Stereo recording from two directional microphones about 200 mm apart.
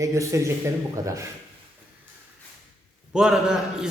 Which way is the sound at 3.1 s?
5° right (ahead or behind).